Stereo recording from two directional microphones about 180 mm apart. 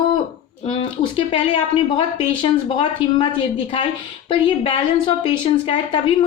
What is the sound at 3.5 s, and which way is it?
A woman's voice, 30° left (ahead or behind).